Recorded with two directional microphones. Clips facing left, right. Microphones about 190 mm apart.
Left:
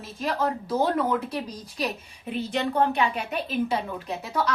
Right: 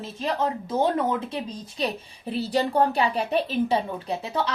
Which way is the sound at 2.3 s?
35° right (ahead or behind).